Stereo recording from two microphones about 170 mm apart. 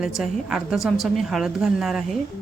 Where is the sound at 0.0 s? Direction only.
Centre (ahead or behind).